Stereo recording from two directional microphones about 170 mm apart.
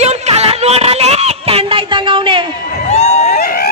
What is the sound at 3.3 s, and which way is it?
Music, 60° left (ahead or behind).